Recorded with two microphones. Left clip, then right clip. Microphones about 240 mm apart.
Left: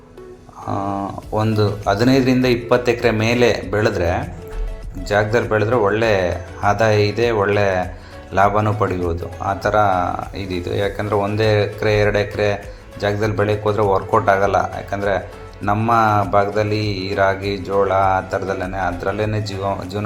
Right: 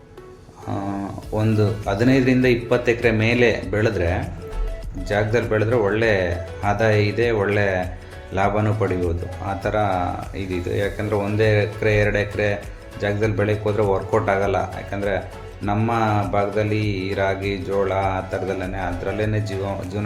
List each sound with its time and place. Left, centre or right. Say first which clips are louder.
1.3 s speech: left 3 dB; centre